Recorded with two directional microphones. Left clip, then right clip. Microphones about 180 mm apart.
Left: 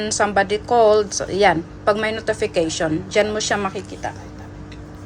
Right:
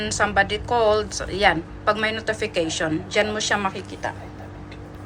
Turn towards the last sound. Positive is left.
turn(degrees=25)  # may be behind; listen again after turning